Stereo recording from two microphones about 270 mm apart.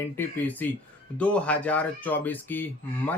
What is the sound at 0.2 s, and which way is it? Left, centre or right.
Speech, centre.